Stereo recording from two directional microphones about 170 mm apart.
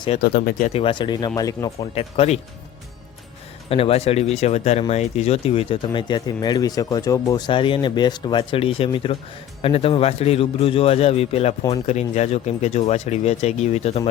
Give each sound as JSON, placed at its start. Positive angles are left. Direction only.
{"t": 0.2, "sound": "speech", "side_deg": 60}
{"t": 0.7, "sound": "speech", "side_deg": 30}
{"t": 1.8, "sound": "speech", "side_deg": 35}
{"t": 3.7, "sound": "speech", "side_deg": 35}